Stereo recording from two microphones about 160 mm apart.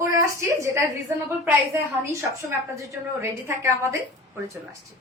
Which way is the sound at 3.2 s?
15° right (ahead or behind).